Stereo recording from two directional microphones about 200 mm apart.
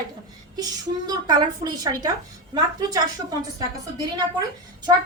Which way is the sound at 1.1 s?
20° right (ahead or behind).